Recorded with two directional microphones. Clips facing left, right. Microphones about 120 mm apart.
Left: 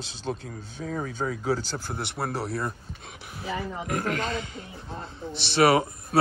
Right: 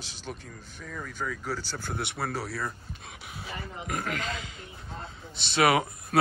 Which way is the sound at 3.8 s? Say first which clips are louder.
Left 3 dB; 45° left (ahead or behind).